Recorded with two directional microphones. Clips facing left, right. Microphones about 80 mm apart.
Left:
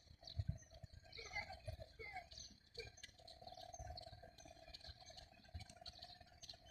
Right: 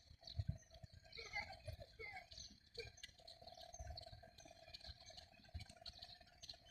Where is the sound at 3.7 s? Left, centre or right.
Right.